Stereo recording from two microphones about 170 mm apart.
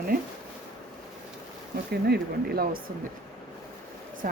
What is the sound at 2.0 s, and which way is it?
Speech, 65° right (ahead or behind).